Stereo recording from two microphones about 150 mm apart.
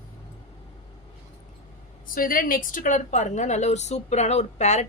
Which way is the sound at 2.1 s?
70° left (ahead or behind).